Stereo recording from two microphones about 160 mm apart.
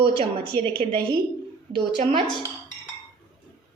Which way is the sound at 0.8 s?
45° right (ahead or behind).